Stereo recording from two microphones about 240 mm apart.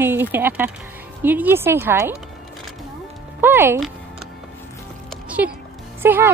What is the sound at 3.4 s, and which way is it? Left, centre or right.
Speech, centre.